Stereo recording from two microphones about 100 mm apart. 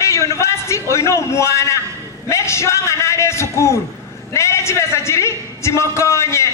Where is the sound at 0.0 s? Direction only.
30° left (ahead or behind).